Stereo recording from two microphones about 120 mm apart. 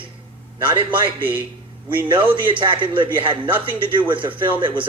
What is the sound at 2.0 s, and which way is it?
A man's voice, 45° right (ahead or behind).